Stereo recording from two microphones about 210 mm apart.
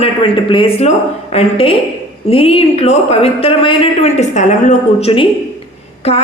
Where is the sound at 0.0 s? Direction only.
25° left (ahead or behind).